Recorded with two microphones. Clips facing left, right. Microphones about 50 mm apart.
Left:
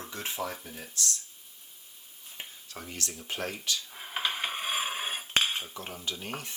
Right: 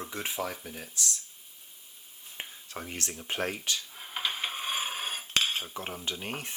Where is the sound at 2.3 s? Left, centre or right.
Right.